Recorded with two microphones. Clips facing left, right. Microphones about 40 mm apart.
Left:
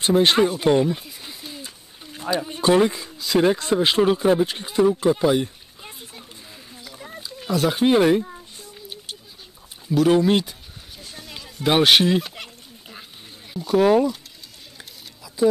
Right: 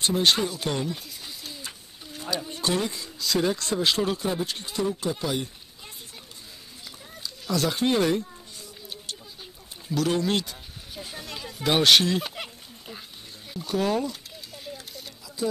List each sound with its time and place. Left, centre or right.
0.0 s speech: left
0.6 s a sound: left
2.1 s speech: left
7.5 s speech: centre
9.9 s speech: centre
11.0 s a sound: centre
11.6 s speech: centre
13.5 s speech: centre